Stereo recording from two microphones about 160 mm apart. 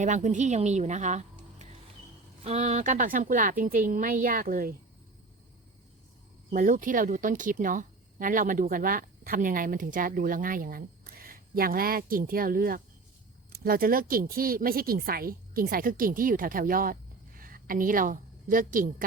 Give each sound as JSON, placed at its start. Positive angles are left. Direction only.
{"t": 0.0, "sound": "a woman's voice", "side_deg": -50}
{"t": 6.5, "sound": "a woman's voice", "side_deg": -60}